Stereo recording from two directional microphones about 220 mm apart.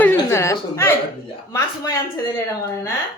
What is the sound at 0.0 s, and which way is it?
Chuckle, 10° left (ahead or behind).